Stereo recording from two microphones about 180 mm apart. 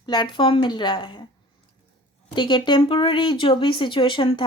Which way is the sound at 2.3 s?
25° left (ahead or behind).